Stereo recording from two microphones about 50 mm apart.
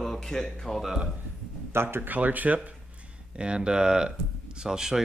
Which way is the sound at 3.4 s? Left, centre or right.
Right.